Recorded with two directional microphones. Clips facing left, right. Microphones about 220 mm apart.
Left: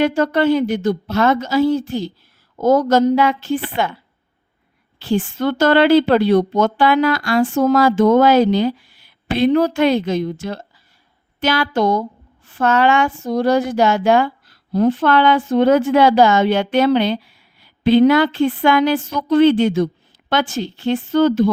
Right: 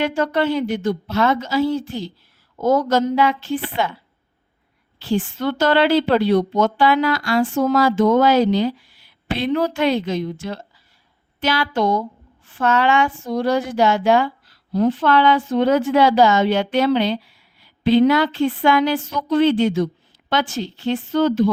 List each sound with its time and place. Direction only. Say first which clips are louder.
0.0 s a woman's voice: left 4 dB; 40° left (ahead or behind)
4.9 s a woman's voice: left 2 dB; 50° left (ahead or behind)